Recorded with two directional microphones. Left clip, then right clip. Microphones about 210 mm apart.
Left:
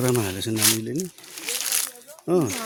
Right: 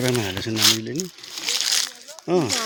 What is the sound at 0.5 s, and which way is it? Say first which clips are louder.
Speech: right 5 dB; 50° right (ahead or behind).